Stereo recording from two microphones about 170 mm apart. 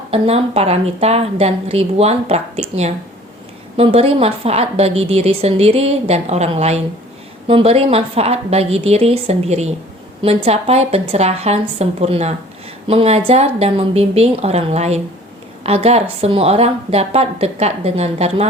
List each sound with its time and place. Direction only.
0.1 s a woman's voice: 35° right (ahead or behind)